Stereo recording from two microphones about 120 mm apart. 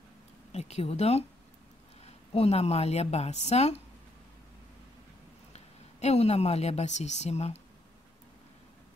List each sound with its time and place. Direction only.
0.5 s a woman's voice: 65° left (ahead or behind)
2.3 s a woman's voice: 60° left (ahead or behind)
5.5 s a woman's voice: 65° left (ahead or behind)